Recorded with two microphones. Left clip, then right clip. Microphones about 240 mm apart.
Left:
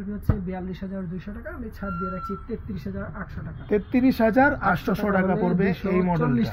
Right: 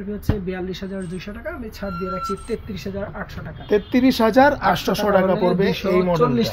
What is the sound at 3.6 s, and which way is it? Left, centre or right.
Speech, right.